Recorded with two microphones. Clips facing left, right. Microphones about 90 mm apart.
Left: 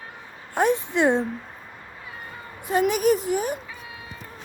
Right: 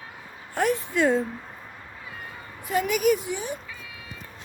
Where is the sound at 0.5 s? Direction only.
20° left (ahead or behind).